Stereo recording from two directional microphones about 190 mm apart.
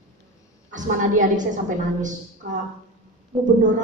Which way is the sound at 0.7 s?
40° right (ahead or behind).